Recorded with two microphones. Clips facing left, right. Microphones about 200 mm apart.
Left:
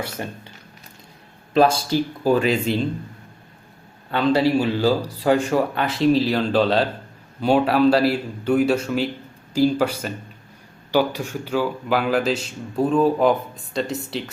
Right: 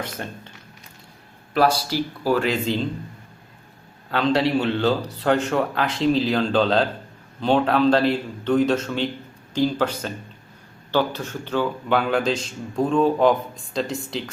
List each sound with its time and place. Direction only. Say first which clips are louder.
0.2 s a man's voice: left 2 dB; 10° left (ahead or behind)
1.5 s speech: left 3 dB; 25° left (ahead or behind)
4.1 s a man's voice: left 2 dB; 5° left (ahead or behind)